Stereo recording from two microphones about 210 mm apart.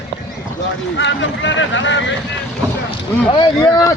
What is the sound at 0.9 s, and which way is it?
Speech, 60° left (ahead or behind).